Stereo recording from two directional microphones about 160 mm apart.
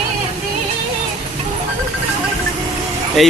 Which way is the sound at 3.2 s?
Centre (ahead or behind).